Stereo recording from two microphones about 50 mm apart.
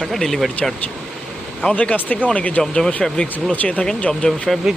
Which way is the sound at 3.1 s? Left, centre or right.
Left.